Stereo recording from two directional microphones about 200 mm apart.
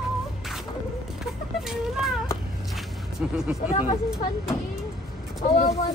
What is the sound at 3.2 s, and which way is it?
Speech, 5° right (ahead or behind).